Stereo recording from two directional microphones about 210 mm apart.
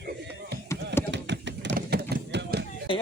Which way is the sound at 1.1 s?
55° right (ahead or behind).